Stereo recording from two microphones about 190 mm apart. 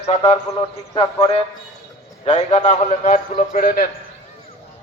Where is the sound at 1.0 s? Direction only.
15° left (ahead or behind).